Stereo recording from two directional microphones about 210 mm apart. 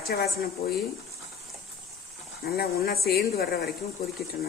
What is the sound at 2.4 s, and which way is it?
A woman's voice, 45° left (ahead or behind).